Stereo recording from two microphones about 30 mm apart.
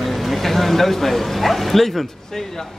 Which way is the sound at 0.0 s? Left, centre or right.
Centre.